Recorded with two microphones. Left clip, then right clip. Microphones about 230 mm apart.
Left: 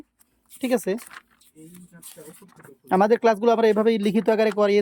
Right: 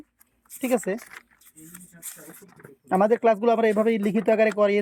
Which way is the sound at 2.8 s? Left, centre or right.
Centre.